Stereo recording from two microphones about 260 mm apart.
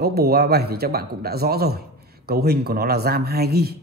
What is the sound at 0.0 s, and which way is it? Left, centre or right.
Speech, right.